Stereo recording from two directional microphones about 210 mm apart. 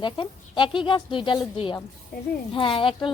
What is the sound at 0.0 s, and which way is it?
A woman's voice, 20° left (ahead or behind).